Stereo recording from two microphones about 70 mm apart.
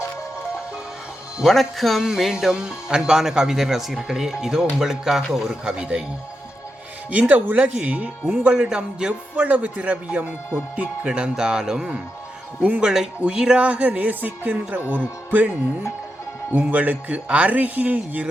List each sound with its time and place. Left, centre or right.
1.5 s speech: centre
7.1 s speech: centre
9.3 s a man's voice: right